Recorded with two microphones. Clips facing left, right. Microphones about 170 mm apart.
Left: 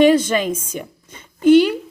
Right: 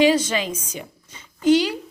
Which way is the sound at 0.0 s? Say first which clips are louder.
Left 4 dB; 55° left (ahead or behind).